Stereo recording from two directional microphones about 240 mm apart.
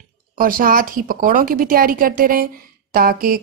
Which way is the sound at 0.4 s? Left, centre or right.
Right.